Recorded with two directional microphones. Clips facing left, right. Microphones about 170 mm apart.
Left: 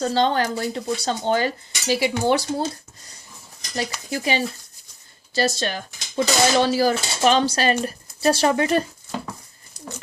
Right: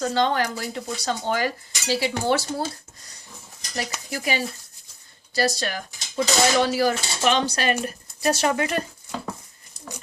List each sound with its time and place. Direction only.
0.0 s speech: 30° left (ahead or behind)
1.9 s cutlery: 15° left (ahead or behind)
3.8 s speech: 25° left (ahead or behind)